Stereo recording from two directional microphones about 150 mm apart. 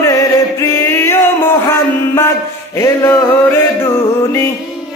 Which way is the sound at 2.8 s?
20° left (ahead or behind).